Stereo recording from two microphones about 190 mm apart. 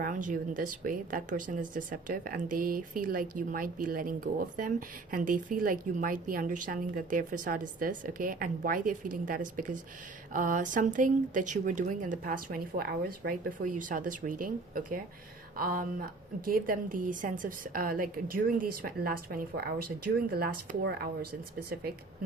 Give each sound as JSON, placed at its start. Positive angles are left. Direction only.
{"t": 0.0, "sound": "a woman's voice", "side_deg": -45}